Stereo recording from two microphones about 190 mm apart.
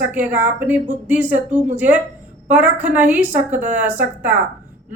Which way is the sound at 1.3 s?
40° right (ahead or behind).